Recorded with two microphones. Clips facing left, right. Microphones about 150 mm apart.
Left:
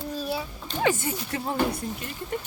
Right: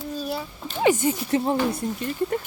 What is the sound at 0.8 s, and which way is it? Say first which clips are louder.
Speech: right 5 dB; 20° right (ahead or behind).